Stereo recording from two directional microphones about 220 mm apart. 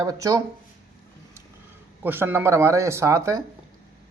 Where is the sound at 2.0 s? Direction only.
10° right (ahead or behind).